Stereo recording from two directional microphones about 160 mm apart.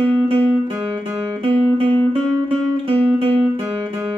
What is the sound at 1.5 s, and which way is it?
Music, 35° right (ahead or behind).